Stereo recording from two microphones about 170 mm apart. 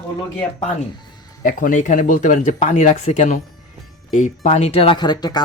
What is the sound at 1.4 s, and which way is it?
Speech, 50° left (ahead or behind).